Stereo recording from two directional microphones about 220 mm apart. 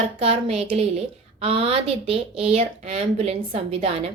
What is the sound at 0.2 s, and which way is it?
Speech, 25° right (ahead or behind).